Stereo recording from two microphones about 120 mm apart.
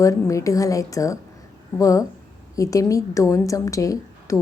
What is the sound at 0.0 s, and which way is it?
A woman's voice, 25° left (ahead or behind).